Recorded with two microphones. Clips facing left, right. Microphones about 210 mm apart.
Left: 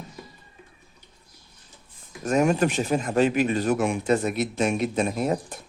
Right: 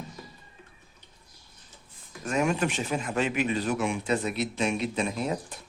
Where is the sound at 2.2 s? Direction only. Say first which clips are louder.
Left 5 dB; 40° left (ahead or behind).